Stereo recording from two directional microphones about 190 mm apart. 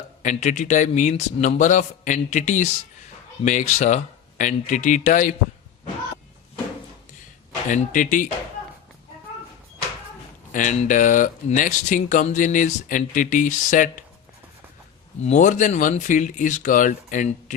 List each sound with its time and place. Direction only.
0.2 s speech: 40° left (ahead or behind)
7.7 s speech: 40° left (ahead or behind)
10.5 s speech: 40° left (ahead or behind)
15.2 s speech: 40° left (ahead or behind)